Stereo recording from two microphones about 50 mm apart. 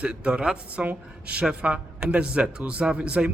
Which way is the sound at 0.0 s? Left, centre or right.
Right.